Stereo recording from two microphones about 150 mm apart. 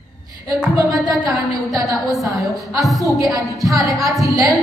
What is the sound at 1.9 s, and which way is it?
Speech, centre (ahead or behind).